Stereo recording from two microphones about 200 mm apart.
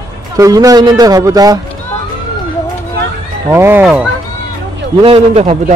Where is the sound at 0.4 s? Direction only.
15° right (ahead or behind).